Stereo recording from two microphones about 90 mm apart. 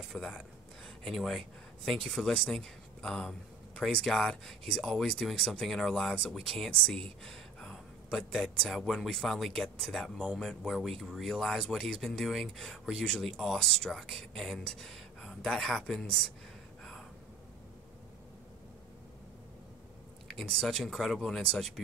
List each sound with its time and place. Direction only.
0.1 s speech: 5° left (ahead or behind)
20.2 s speech: 5° left (ahead or behind)